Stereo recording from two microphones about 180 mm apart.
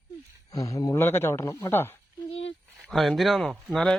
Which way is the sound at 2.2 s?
35° left (ahead or behind).